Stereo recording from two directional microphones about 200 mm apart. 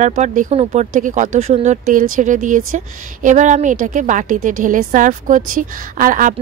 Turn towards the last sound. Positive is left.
turn(degrees=-40)  # may be behind; listen again after turning